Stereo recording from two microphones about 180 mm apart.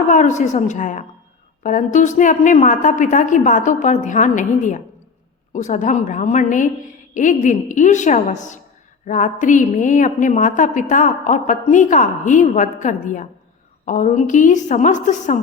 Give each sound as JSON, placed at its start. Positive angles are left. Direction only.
{"t": 0.1, "sound": "a woman's voice", "side_deg": 45}